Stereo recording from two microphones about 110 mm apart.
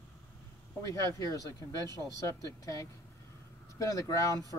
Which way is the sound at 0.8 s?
30° left (ahead or behind).